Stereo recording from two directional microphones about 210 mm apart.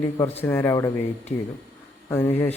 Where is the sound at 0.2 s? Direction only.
10° left (ahead or behind).